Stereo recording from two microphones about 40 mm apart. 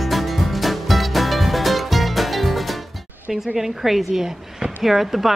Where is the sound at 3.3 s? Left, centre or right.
Centre.